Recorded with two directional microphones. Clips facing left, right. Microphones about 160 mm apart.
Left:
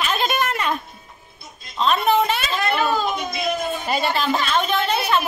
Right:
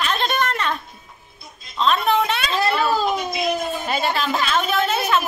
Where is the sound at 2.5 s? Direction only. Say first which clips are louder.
Right 3 dB; 35° right (ahead or behind).